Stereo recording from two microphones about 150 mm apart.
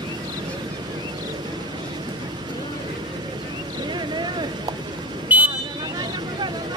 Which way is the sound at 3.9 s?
30° right (ahead or behind).